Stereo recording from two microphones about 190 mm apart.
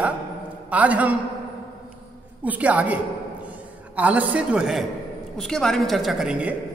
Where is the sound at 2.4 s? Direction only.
10° right (ahead or behind).